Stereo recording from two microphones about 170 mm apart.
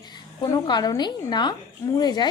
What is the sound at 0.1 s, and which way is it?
A woman's voice, 25° left (ahead or behind).